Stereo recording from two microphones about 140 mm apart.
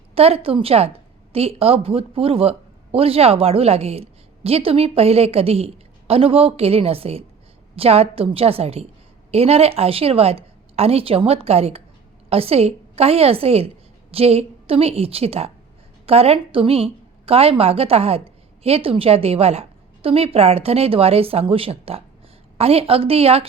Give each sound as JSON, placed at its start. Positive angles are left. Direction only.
{"t": 0.1, "sound": "speech", "side_deg": -45}